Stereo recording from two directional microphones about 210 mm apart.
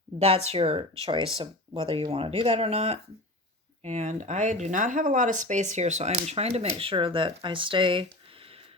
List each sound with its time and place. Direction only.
0.2 s speech: 30° right (ahead or behind)